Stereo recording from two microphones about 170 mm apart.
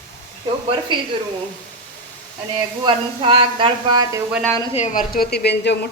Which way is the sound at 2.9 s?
30° right (ahead or behind).